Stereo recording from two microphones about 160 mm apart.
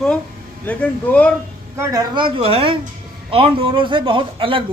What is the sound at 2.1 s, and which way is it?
A man's voice, 30° right (ahead or behind).